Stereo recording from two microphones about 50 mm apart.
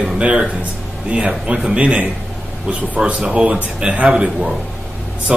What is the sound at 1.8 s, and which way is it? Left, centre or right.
Speech, right.